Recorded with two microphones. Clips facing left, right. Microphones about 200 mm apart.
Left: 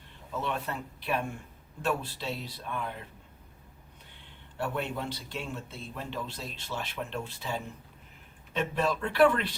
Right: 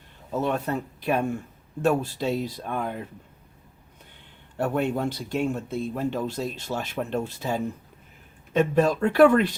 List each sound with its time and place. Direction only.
0.3 s speech: 45° right (ahead or behind)
4.5 s speech: 45° right (ahead or behind)